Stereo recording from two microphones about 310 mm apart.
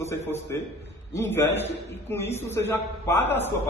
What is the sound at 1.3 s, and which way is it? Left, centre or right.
A man's voice, centre.